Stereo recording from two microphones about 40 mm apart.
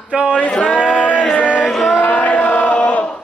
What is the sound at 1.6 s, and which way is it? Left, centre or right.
Music, centre.